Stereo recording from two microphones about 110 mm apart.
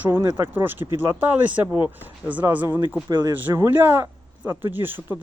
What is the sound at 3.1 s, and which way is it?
Speech, 40° right (ahead or behind).